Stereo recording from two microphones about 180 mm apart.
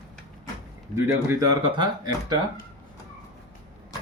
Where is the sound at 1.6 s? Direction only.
25° right (ahead or behind).